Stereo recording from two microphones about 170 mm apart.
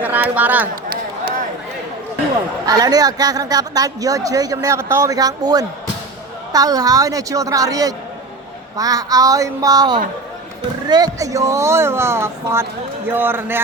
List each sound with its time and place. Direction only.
0.0 s speech: 10° right (ahead or behind)
2.6 s a woman's voice: 25° right (ahead or behind)